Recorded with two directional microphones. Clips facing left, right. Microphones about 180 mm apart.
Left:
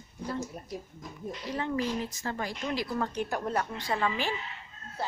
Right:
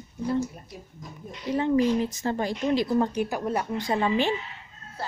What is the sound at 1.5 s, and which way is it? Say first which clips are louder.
Speech: right 9 dB; 20° right (ahead or behind).